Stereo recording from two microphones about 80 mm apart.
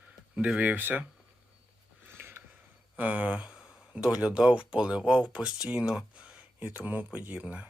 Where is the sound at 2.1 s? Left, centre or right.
Right.